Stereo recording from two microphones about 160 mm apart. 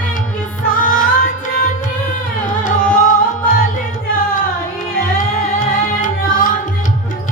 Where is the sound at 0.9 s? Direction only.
60° left (ahead or behind).